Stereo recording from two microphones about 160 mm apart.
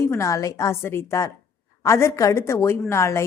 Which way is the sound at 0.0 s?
20° left (ahead or behind).